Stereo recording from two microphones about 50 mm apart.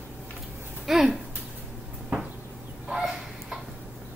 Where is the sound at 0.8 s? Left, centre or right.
Centre.